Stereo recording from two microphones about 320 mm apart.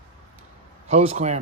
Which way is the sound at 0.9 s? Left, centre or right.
Centre.